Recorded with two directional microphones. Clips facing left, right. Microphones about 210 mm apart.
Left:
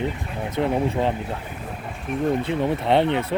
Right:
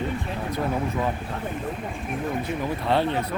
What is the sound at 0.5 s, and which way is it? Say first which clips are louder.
Speech: left 5 dB; 25° left (ahead or behind).